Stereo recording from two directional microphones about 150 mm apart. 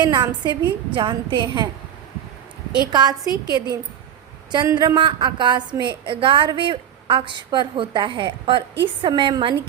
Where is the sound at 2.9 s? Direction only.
25° right (ahead or behind).